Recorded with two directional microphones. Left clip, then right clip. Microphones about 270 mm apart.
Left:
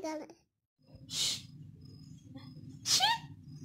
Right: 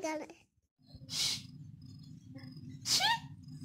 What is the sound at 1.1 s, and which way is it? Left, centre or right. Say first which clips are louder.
Snort: left 1 dB; centre.